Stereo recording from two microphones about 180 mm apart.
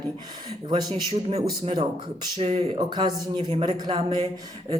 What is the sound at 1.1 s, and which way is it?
Speech, 35° right (ahead or behind).